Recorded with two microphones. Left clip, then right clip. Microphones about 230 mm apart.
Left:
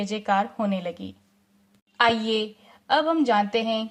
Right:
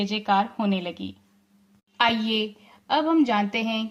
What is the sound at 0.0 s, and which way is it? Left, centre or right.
A woman's voice, left.